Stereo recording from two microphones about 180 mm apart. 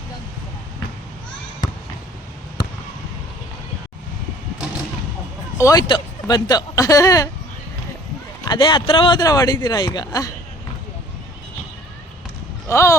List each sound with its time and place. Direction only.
5.5 s speech: 20° left (ahead or behind)
8.4 s speech: 25° left (ahead or behind)
12.6 s speech: 15° left (ahead or behind)